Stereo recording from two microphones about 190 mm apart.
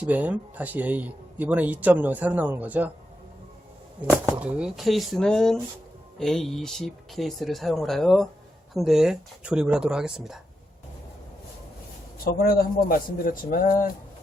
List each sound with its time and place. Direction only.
0.0 s speech: 10° right (ahead or behind)
4.3 s speech: 5° right (ahead or behind)
12.2 s a man's voice: 55° left (ahead or behind)